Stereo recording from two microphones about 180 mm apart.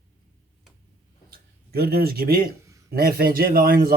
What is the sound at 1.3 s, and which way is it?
Speech, 60° right (ahead or behind).